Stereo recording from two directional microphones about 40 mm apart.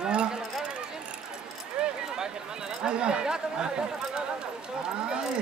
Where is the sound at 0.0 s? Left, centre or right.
Right.